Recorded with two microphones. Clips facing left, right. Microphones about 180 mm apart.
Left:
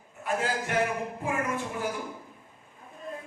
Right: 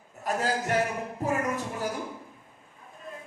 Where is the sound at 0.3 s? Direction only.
40° right (ahead or behind).